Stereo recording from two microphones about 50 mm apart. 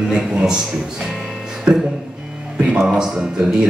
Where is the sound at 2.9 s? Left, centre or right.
Centre.